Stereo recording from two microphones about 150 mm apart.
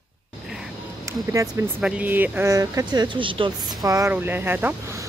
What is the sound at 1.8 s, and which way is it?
Speech, 10° right (ahead or behind).